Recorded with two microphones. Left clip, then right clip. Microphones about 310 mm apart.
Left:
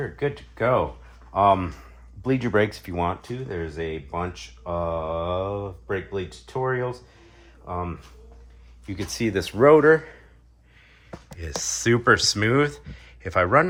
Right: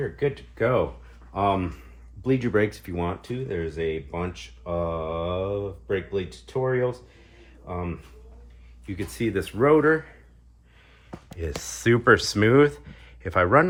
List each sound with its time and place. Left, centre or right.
0.2 s speech: centre; by 10.1 s left
11.6 s speech: centre